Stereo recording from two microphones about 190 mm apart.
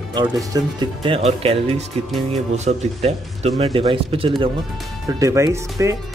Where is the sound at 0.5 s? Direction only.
20° right (ahead or behind).